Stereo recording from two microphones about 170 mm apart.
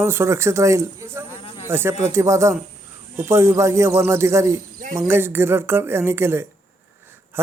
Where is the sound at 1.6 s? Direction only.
15° right (ahead or behind).